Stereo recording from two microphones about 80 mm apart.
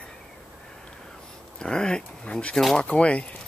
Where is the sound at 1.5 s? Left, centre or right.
Centre.